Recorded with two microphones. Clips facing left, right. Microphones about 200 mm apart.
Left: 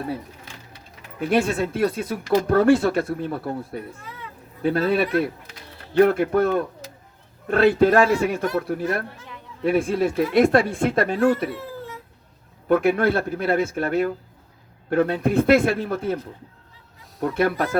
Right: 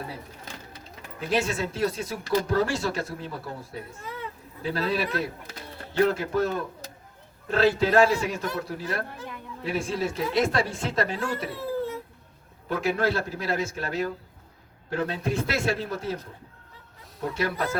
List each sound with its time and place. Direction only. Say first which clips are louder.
1.3 s speech: left 5 dB; 55° left (ahead or behind)
12.6 s speech: left 7 dB; 55° left (ahead or behind)
17.2 s speech: left 7 dB; 55° left (ahead or behind)